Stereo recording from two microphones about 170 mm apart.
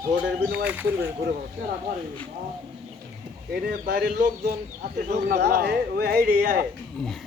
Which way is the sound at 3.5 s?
65° right (ahead or behind).